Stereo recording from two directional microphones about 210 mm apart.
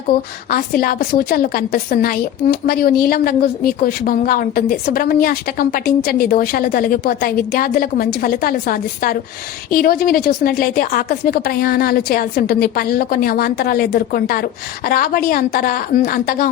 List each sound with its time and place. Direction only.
0.1 s a woman's voice: 45° left (ahead or behind)